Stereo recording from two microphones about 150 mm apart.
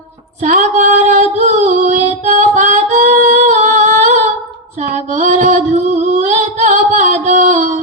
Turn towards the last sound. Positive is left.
turn(degrees=-55)  # may be behind; listen again after turning